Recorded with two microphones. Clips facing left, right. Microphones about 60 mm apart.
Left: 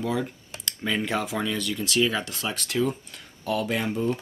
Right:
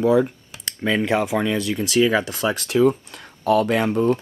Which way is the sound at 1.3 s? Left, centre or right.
Right.